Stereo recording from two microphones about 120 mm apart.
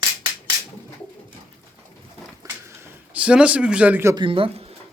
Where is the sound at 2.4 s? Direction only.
25° right (ahead or behind).